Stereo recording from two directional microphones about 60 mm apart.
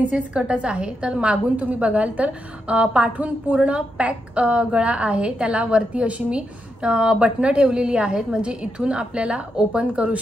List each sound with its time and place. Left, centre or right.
0.0 s a woman's voice: right